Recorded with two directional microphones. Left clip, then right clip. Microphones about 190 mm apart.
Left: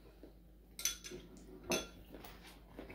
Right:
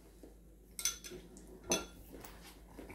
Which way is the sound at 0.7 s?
25° right (ahead or behind).